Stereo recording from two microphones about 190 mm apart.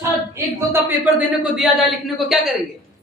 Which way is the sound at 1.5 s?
Centre (ahead or behind).